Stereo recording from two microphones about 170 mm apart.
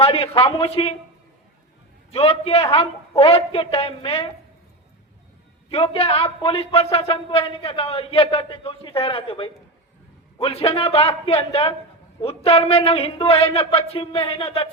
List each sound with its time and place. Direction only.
0.0 s a man's voice: 35° left (ahead or behind)
2.0 s a man's voice: 35° left (ahead or behind)
5.7 s a man's voice: 35° left (ahead or behind)